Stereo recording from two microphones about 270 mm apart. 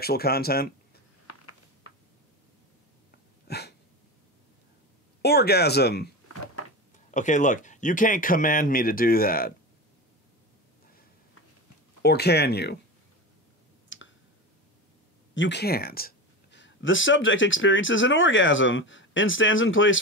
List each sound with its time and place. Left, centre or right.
0.0 s speech: left
1.2 s a sound: left
3.4 s a sound: left
5.2 s speech: left
6.2 s cupboard open or close: left
7.1 s speech: left
12.0 s speech: left
13.8 s clicking: left
15.3 s speech: left